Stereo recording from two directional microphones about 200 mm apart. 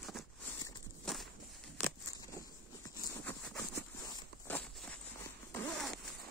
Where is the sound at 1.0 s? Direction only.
Centre (ahead or behind).